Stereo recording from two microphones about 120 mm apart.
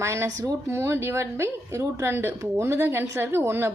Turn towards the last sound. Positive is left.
turn(degrees=-20)  # may be behind; listen again after turning